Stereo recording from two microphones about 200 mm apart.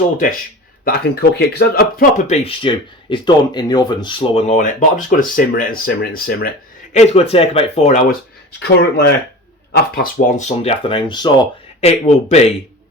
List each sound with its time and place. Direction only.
0.9 s speech: 50° left (ahead or behind)
6.9 s speech: 35° left (ahead or behind)
8.5 s speech: 55° left (ahead or behind); by 12.4 s 30° left (ahead or behind)